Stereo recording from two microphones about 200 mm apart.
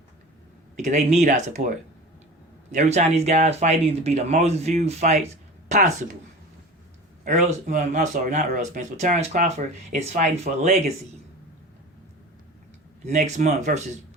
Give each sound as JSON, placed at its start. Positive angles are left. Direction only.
{"t": 0.8, "sound": "speech", "side_deg": -35}
{"t": 2.7, "sound": "speech", "side_deg": -35}
{"t": 7.3, "sound": "speech", "side_deg": -35}
{"t": 13.1, "sound": "speech", "side_deg": -35}